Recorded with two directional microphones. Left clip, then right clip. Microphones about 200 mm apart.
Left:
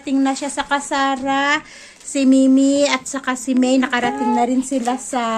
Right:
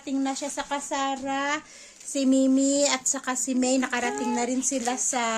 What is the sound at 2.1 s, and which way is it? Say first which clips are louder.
Speech: left 8 dB; 5° right (ahead or behind).